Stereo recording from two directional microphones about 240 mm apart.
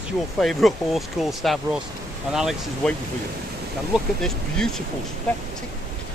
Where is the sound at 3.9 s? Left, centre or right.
Centre.